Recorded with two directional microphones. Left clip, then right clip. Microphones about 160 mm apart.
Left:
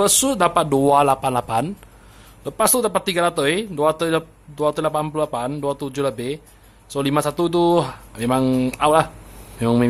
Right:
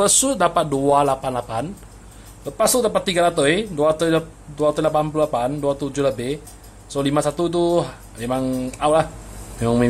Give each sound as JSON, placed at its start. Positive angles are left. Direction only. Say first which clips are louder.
{"t": 0.0, "sound": "speech", "louder": "even", "side_deg": 15}